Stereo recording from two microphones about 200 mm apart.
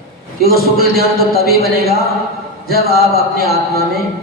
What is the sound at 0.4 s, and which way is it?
A man's voice, 50° left (ahead or behind).